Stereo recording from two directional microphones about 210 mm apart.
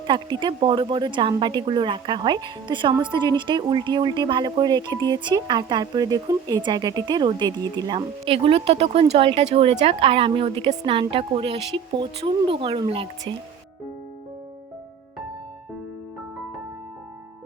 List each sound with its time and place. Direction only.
0.1 s a woman's voice: 20° right (ahead or behind)